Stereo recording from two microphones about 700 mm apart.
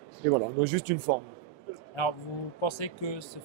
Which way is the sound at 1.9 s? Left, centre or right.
Left.